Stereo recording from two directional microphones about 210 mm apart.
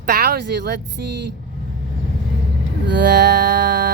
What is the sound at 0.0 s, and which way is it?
Speech, 50° right (ahead or behind).